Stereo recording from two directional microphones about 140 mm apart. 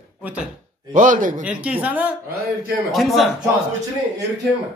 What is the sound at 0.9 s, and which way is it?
Speech, 65° right (ahead or behind).